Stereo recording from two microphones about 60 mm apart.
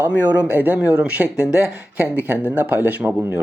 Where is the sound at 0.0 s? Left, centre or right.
Right.